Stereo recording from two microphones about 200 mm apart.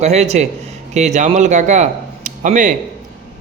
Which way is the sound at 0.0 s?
35° right (ahead or behind).